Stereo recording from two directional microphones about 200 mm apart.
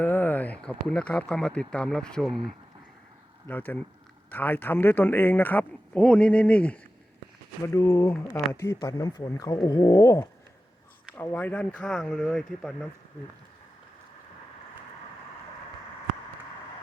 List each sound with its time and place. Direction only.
0.0 s a man's voice: 10° left (ahead or behind)